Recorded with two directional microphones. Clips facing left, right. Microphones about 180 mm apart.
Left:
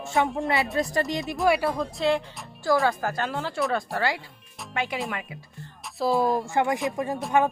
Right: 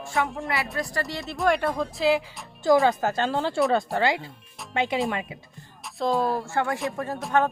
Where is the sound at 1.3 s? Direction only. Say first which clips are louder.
Even; 5° left (ahead or behind).